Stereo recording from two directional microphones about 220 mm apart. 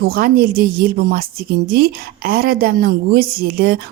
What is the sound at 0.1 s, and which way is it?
A woman's voice, 45° right (ahead or behind).